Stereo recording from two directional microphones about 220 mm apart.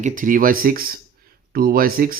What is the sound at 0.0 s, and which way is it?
Speech, 35° right (ahead or behind).